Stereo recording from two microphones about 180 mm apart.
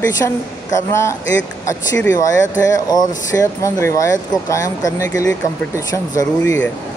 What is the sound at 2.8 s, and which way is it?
Speech, 20° left (ahead or behind).